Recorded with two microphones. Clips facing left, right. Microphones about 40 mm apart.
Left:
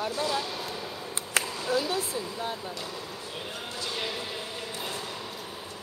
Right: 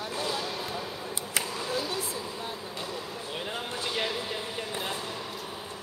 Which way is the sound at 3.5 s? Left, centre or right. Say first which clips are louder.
Right 3 dB; right.